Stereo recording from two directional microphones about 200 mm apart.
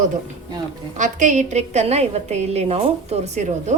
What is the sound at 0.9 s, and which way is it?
A woman's voice, 40° right (ahead or behind).